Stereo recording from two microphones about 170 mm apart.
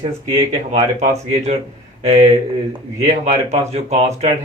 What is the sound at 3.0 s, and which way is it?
Speech, 40° right (ahead or behind).